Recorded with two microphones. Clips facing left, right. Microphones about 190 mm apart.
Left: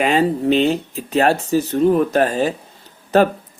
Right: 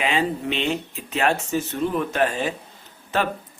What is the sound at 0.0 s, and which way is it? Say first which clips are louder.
Speech: left 7 dB; 40° left (ahead or behind).